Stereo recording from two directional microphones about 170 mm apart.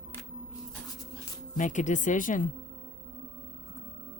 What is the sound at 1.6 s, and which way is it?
Speech, 45° left (ahead or behind).